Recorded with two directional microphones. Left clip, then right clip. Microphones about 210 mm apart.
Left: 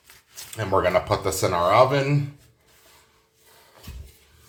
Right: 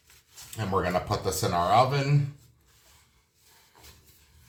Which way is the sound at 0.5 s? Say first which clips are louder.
Left 7 dB; 30° left (ahead or behind).